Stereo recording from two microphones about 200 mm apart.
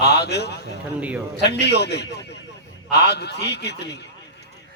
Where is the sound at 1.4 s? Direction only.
55° left (ahead or behind).